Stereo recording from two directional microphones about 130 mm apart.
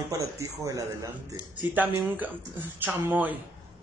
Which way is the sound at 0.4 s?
25° right (ahead or behind).